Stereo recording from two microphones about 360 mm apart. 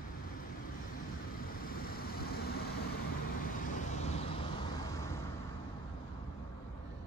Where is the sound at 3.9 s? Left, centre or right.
Centre.